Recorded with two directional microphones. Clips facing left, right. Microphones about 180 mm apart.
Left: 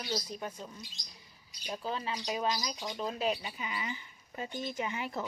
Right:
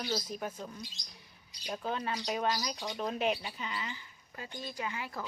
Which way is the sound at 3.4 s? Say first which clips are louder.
Left 1 dB; 10° left (ahead or behind).